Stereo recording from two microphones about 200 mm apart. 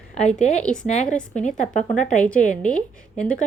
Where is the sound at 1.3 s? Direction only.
35° left (ahead or behind).